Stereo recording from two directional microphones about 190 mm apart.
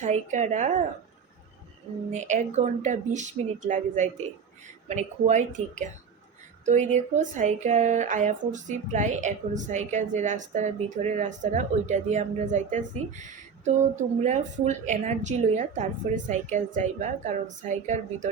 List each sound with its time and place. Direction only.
0.0 s speech: 40° right (ahead or behind)
2.1 s speech: 40° right (ahead or behind)
6.7 s speech: 40° right (ahead or behind)